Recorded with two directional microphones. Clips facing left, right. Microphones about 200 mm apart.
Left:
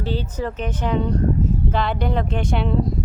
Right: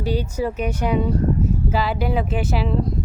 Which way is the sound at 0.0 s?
10° right (ahead or behind).